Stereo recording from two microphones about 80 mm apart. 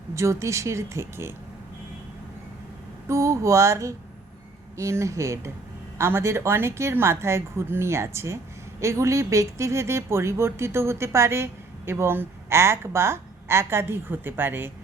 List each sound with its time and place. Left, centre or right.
0.1 s a woman's voice: right
3.1 s a woman's voice: right